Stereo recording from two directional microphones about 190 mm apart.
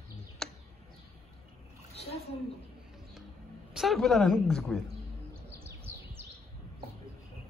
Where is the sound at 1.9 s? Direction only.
30° left (ahead or behind).